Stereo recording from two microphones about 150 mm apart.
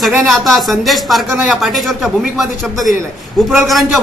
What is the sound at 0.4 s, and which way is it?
A man's voice, centre (ahead or behind).